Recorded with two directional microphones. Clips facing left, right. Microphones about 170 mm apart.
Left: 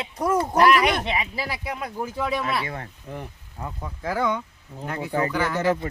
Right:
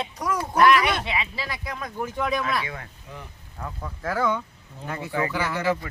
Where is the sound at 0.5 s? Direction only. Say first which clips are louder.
Right 1 dB; 40° left (ahead or behind).